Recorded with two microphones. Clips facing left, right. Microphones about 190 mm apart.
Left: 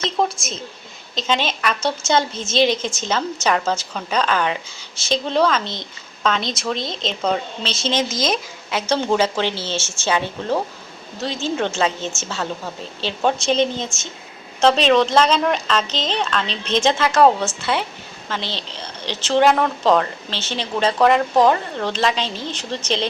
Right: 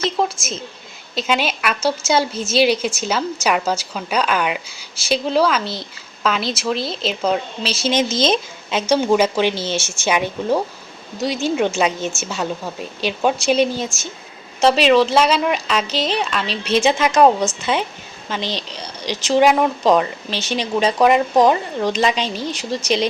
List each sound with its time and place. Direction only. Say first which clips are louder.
0.2 s a woman's voice: even; 5° right (ahead or behind)
7.9 s speech: right 4 dB; 25° right (ahead or behind)
8.9 s a woman's voice: right 3 dB; 10° right (ahead or behind)